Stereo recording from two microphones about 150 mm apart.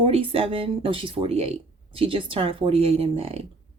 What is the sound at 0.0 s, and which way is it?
Speech, 35° right (ahead or behind).